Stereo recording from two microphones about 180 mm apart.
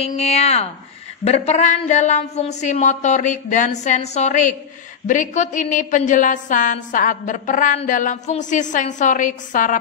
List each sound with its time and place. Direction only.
0.0 s a woman's voice: 35° left (ahead or behind)